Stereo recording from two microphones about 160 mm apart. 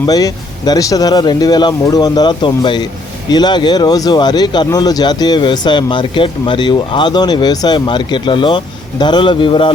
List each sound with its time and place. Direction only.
0.0 s speech: 20° left (ahead or behind)